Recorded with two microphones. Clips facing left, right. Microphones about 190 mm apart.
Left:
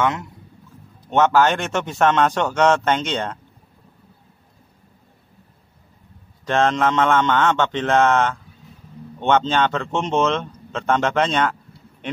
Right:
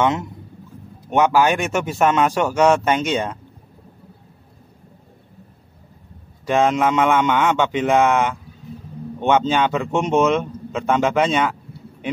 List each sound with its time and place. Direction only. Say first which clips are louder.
0.0 s a man's voice: right 3 dB; 20° right (ahead or behind)
6.4 s speech: right 1 dB; 10° right (ahead or behind)